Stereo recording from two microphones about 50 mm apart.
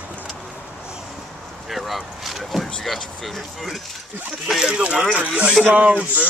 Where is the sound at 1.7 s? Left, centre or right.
Centre.